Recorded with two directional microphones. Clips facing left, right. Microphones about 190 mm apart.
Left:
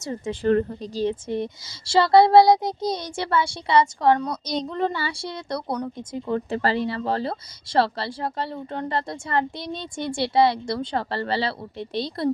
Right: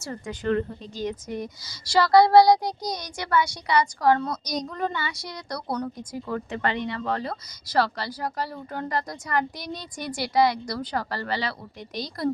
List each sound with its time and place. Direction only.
0.0 s speech: 20° left (ahead or behind)
0.4 s speech: 35° left (ahead or behind)